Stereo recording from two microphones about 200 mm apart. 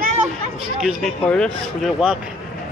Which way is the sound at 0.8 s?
Centre (ahead or behind).